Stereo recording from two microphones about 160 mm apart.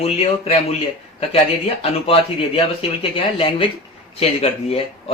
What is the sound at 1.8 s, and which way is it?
Speech, 35° left (ahead or behind).